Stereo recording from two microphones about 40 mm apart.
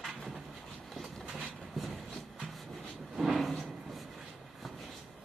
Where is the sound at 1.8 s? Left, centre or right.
Centre.